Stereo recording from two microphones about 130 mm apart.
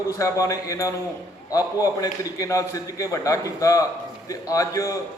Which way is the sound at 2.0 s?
25° left (ahead or behind).